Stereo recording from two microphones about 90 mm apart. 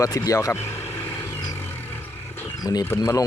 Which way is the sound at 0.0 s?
40° left (ahead or behind).